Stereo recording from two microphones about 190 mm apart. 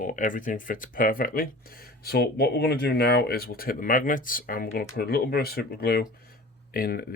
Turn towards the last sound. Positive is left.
turn(degrees=55)  # may be behind; listen again after turning